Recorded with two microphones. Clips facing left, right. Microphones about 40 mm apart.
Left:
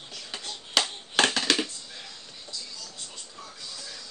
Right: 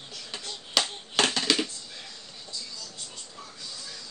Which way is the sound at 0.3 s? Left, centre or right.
Centre.